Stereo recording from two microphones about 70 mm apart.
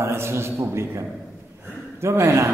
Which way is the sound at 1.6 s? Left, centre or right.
Right.